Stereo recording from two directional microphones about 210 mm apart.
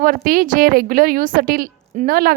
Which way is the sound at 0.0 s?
45° right (ahead or behind).